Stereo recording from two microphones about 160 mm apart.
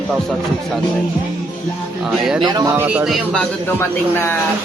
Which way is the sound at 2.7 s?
10° right (ahead or behind).